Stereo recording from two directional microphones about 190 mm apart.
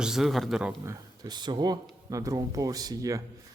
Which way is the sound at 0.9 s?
20° right (ahead or behind).